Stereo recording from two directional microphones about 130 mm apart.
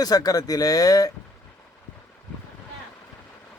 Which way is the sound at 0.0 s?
30° left (ahead or behind).